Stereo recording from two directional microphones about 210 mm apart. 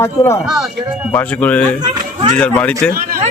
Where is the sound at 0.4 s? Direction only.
Centre (ahead or behind).